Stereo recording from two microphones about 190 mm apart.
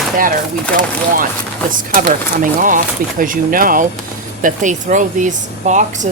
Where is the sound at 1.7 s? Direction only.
45° right (ahead or behind).